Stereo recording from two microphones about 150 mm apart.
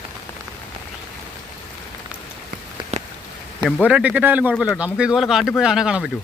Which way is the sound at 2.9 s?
50° right (ahead or behind).